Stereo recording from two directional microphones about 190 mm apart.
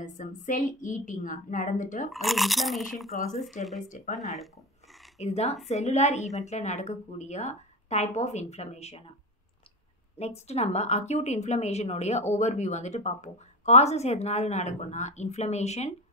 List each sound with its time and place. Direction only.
0.0 s a woman's voice: 45° left (ahead or behind)
2.0 s speech: centre (ahead or behind)
3.6 s a woman's voice: 40° left (ahead or behind)
4.2 s speech: centre (ahead or behind)
4.9 s a sound: centre (ahead or behind)
5.2 s a woman's voice: 35° left (ahead or behind)
10.1 s a woman's voice: 35° left (ahead or behind)